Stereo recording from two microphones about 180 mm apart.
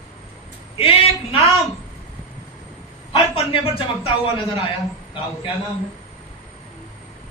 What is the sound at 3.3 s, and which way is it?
Speech, 30° left (ahead or behind).